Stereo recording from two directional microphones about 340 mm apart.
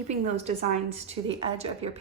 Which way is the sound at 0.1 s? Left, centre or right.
Centre.